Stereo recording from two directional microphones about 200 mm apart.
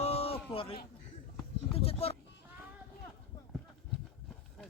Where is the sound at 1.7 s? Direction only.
30° left (ahead or behind).